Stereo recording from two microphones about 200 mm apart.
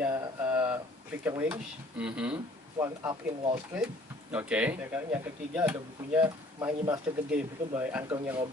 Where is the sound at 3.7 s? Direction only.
5° right (ahead or behind).